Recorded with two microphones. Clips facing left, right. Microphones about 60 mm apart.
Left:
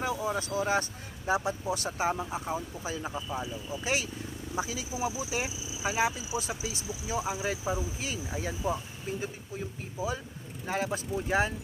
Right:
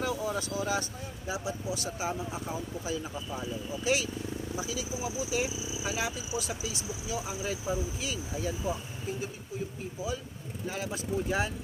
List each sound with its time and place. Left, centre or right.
0.0 s vehicle: left
1.3 s speech: left
2.3 s speech: left
10.7 s speech: left